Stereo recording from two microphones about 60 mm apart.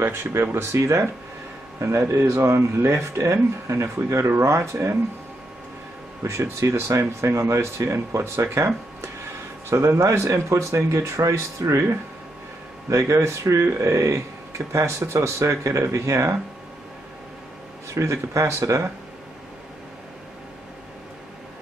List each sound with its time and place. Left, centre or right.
0.0 s speech: right
6.2 s speech: right
9.7 s speech: right
17.9 s speech: right